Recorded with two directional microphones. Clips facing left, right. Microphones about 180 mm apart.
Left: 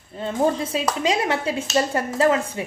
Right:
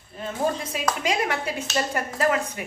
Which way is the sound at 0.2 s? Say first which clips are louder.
Left 5 dB; 25° left (ahead or behind).